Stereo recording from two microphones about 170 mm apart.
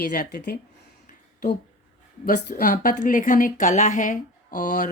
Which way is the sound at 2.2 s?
60° left (ahead or behind).